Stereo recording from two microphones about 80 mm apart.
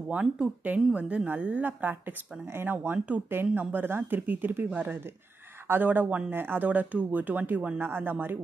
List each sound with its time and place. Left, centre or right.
0.1 s speech: centre